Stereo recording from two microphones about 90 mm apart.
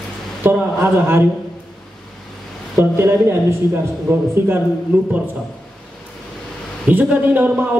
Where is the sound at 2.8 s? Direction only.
25° right (ahead or behind).